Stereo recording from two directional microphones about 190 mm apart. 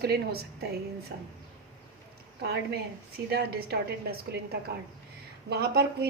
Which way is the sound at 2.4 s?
60° right (ahead or behind).